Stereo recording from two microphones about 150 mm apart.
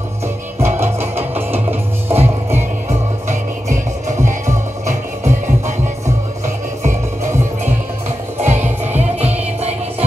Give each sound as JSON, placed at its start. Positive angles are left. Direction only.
{"t": 0.7, "sound": "music", "side_deg": -15}
{"t": 4.8, "sound": "music", "side_deg": -55}
{"t": 6.8, "sound": "music", "side_deg": -55}